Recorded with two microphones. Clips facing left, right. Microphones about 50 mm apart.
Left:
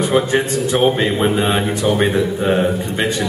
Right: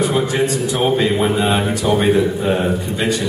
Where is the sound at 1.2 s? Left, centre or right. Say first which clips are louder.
Even; left.